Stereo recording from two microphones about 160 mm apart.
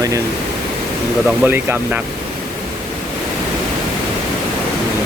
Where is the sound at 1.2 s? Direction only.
10° right (ahead or behind).